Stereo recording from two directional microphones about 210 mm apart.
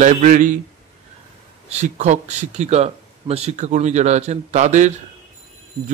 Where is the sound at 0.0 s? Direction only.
35° right (ahead or behind).